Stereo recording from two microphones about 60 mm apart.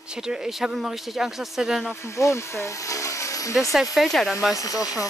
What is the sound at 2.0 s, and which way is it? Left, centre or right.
Speech, left.